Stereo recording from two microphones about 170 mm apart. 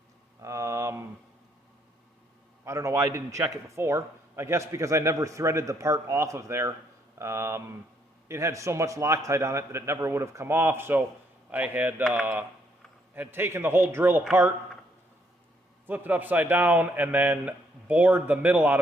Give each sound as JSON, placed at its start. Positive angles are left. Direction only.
{"t": 0.4, "sound": "a sound", "side_deg": -15}
{"t": 2.6, "sound": "a man's voice", "side_deg": -15}
{"t": 15.9, "sound": "a man's voice", "side_deg": -10}